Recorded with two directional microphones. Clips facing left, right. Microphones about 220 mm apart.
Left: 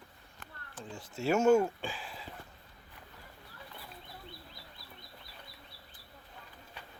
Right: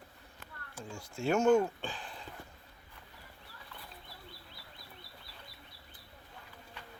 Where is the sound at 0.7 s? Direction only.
5° left (ahead or behind).